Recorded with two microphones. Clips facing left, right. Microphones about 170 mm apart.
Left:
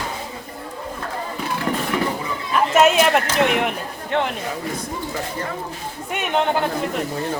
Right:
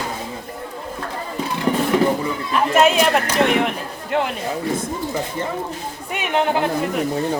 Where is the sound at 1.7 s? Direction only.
15° right (ahead or behind).